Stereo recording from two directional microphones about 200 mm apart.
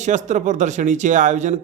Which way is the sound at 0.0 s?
35° right (ahead or behind).